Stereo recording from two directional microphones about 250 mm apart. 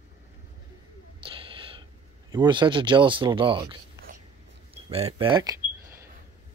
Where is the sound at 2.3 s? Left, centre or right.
Centre.